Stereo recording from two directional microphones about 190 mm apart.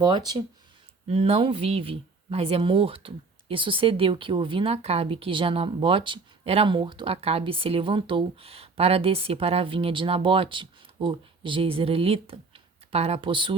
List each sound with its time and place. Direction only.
0.0 s speech: 20° right (ahead or behind)